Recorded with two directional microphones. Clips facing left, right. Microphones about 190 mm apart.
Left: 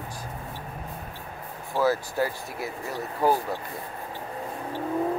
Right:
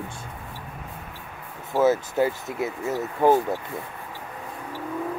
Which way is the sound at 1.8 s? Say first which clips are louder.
Right 4 dB; 20° right (ahead or behind).